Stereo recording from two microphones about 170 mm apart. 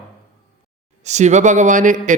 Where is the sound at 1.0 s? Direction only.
45° right (ahead or behind).